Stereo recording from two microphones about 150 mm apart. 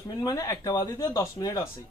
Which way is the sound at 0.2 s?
25° left (ahead or behind).